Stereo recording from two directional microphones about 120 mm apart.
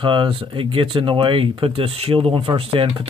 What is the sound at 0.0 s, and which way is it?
Speech, 45° right (ahead or behind).